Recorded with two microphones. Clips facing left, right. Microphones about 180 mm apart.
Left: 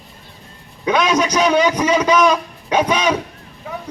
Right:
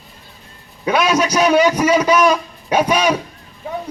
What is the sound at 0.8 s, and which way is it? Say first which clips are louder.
A man's voice: even; 10° right (ahead or behind).